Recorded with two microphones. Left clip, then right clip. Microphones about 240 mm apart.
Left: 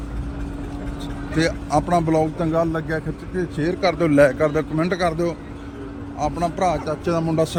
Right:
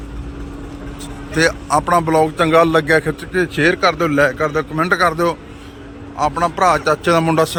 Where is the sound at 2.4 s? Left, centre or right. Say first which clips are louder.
Right 9 dB; right.